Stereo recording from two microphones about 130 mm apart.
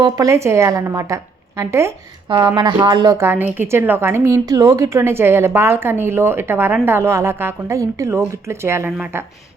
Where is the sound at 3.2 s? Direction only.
15° right (ahead or behind).